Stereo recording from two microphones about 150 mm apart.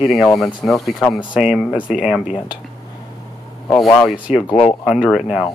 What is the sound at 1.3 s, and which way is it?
Speech, 5° right (ahead or behind).